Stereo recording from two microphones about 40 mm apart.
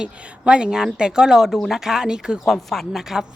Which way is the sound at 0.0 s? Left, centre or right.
Right.